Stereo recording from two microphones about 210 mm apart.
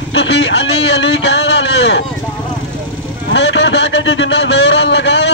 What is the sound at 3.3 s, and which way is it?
A man's voice, 60° left (ahead or behind).